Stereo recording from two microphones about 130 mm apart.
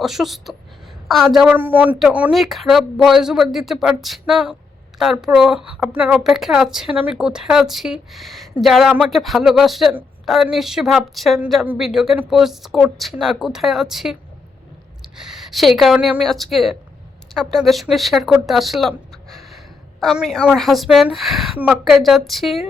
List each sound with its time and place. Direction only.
0.0 s speech: centre (ahead or behind)
1.5 s speech: 15° right (ahead or behind)
6.1 s speech: centre (ahead or behind)
11.6 s speech: 10° right (ahead or behind)
15.2 s speech: 5° right (ahead or behind)